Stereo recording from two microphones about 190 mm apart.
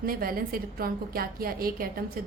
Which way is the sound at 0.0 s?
50° right (ahead or behind).